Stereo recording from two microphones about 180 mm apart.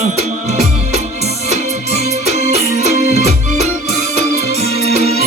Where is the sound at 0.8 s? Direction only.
35° right (ahead or behind).